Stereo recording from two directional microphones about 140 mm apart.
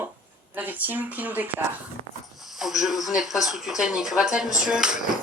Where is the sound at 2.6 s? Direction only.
Centre (ahead or behind).